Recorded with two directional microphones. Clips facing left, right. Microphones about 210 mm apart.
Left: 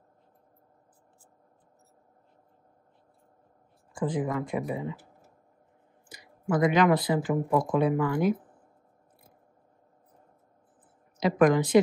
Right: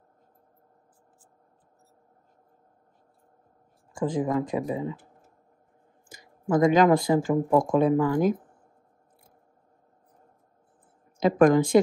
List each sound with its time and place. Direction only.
4.0 s speech: 40° right (ahead or behind)
4.4 s speech: 30° right (ahead or behind)
6.0 s speech: 45° right (ahead or behind)
11.1 s a woman's voice: 45° right (ahead or behind)